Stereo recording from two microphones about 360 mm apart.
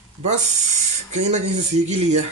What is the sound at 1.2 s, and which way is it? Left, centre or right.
Speech, centre.